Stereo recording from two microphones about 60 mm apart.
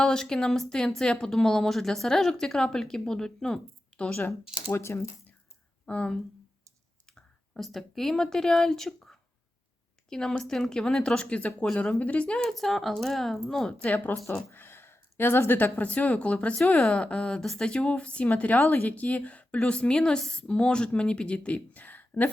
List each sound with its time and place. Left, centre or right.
0.0 s speech: centre
4.4 s speech: centre
4.7 s speech: left
5.8 s speech: left
7.6 s a woman's voice: centre
12.5 s speech: centre
13.9 s a woman's voice: left
15.8 s a woman's voice: left